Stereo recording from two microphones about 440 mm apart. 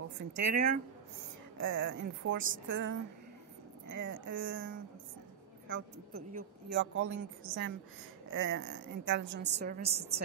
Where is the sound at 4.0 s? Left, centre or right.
Right.